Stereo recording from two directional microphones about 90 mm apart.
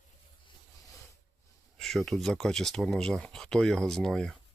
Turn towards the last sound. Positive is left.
turn(degrees=5)  # may be behind; listen again after turning